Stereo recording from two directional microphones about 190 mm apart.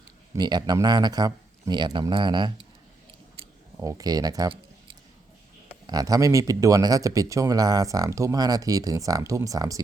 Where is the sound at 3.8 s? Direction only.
20° right (ahead or behind).